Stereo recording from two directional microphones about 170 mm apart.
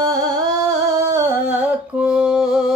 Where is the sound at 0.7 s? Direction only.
20° right (ahead or behind).